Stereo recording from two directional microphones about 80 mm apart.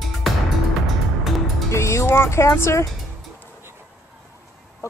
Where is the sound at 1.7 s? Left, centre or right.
Left.